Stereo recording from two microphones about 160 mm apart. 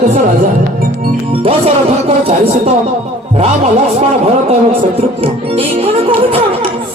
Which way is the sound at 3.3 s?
45° right (ahead or behind).